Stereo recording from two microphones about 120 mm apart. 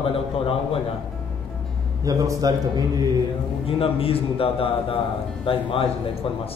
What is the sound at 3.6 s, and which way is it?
A man's voice, 50° left (ahead or behind).